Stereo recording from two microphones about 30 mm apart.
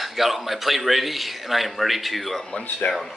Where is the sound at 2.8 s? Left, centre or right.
Left.